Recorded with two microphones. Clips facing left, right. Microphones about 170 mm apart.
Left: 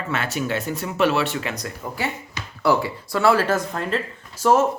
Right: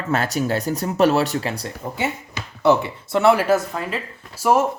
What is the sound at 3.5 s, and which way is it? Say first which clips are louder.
Speech: right 3 dB; 10° right (ahead or behind).